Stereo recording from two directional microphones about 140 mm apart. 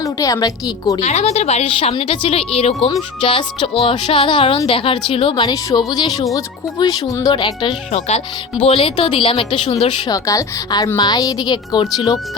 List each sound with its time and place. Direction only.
0.0 s a woman's voice: 25° left (ahead or behind)
1.0 s a woman's voice: 50° left (ahead or behind); by 7.8 s 35° left (ahead or behind)
7.9 s a woman's voice: 50° left (ahead or behind)
10.1 s a woman's voice: 25° left (ahead or behind)